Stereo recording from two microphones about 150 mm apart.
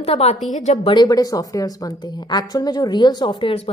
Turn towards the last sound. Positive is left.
turn(degrees=40)  # may be behind; listen again after turning